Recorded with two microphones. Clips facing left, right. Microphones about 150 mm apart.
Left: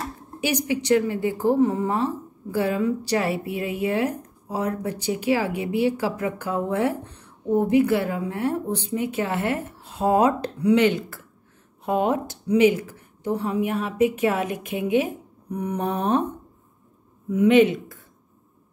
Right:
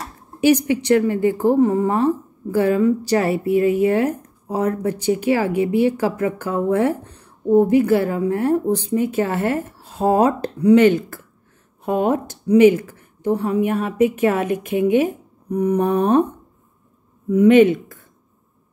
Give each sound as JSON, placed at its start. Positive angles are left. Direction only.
{"t": 0.7, "sound": "a woman's voice", "side_deg": -55}
{"t": 17.3, "sound": "a woman's voice", "side_deg": -50}